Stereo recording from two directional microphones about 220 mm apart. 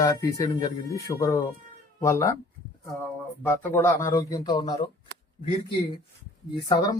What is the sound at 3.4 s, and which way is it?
Speech, 10° left (ahead or behind).